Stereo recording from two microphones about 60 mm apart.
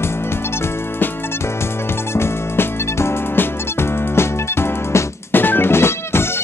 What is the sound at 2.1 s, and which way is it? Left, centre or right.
Music, left.